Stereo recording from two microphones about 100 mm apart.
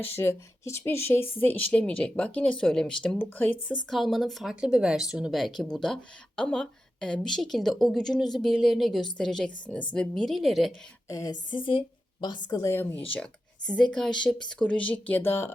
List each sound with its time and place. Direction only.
0.2 s a woman's voice: 25° left (ahead or behind); by 3.2 s 10° left (ahead or behind)
3.2 s a woman's voice: 20° left (ahead or behind)
3.8 s speech: centre (ahead or behind)
11.1 s a woman's voice: 35° left (ahead or behind)
11.5 s a woman's voice: 55° left (ahead or behind)
12.2 s a woman's voice: 45° left (ahead or behind)
12.7 s speech: 25° left (ahead or behind)
14.3 s speech: 5° right (ahead or behind)
14.6 s a woman's voice: 10° left (ahead or behind)